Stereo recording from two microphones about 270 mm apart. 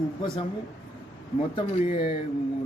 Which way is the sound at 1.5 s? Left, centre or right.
Left.